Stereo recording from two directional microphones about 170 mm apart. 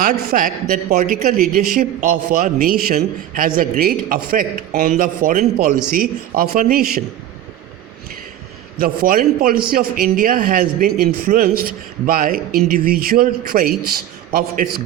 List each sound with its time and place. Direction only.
0.0 s speech: 55° right (ahead or behind)
8.8 s speech: 55° right (ahead or behind)